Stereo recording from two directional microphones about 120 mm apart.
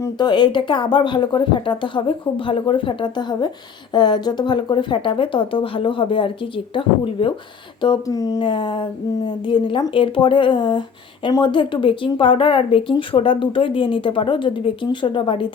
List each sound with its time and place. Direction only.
0.2 s speech: 40° left (ahead or behind)